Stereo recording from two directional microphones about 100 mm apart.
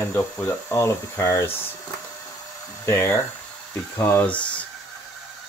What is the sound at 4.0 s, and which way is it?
Speech, 20° left (ahead or behind).